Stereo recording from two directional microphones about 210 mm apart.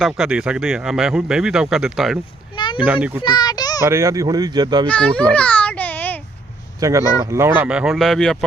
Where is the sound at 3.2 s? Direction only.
20° left (ahead or behind).